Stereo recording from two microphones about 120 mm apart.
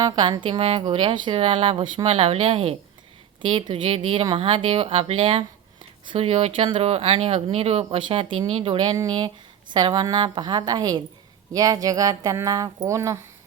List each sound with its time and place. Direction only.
0.0 s a woman's voice: 40° right (ahead or behind)